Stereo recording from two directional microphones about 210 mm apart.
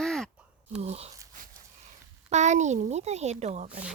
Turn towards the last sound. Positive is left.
turn(degrees=-30)  # may be behind; listen again after turning